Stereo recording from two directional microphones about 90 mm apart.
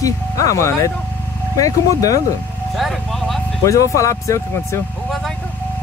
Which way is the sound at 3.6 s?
35° left (ahead or behind).